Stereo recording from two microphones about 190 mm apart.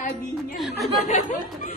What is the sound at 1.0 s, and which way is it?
Speech, 40° left (ahead or behind).